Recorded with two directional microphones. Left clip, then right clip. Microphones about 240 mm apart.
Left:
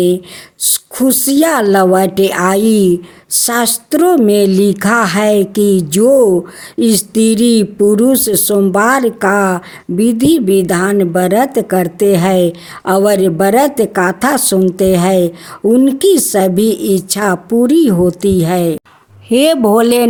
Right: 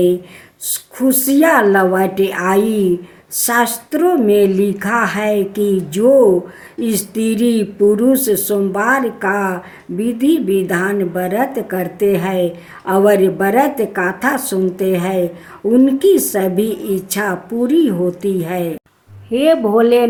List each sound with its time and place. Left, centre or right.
0.9 s speech: left